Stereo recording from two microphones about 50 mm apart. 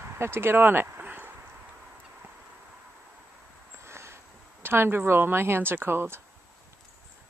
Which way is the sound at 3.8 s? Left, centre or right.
Right.